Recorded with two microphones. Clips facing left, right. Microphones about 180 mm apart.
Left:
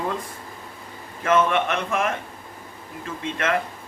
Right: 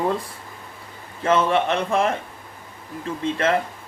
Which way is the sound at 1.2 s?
30° right (ahead or behind).